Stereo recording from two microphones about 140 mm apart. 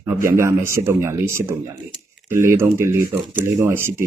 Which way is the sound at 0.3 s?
20° right (ahead or behind).